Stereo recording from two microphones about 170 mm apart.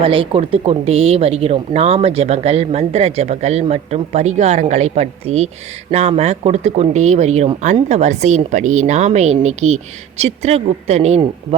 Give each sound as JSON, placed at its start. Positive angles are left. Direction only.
{"t": 0.0, "sound": "speech", "side_deg": -30}